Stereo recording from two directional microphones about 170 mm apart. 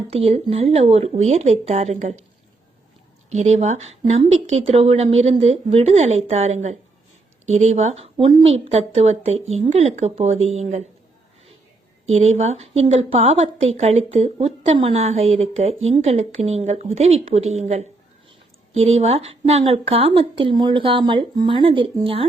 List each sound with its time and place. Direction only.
0.1 s a woman's voice: 35° right (ahead or behind)
3.2 s a woman's voice: 40° right (ahead or behind)
12.1 s a woman's voice: 40° right (ahead or behind)